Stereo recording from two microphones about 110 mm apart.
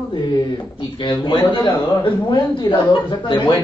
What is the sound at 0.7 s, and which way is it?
A man's voice, 45° left (ahead or behind).